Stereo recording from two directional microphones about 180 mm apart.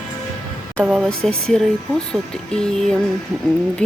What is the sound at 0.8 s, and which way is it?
Speech, centre (ahead or behind).